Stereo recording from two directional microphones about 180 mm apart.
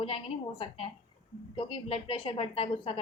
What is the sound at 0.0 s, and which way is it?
A woman's voice, 30° left (ahead or behind).